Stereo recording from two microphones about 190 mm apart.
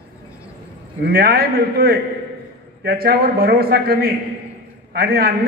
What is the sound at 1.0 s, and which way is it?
A man's voice, 50° right (ahead or behind).